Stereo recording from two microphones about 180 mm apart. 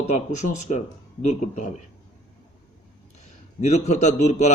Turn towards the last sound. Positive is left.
turn(degrees=40)  # may be behind; listen again after turning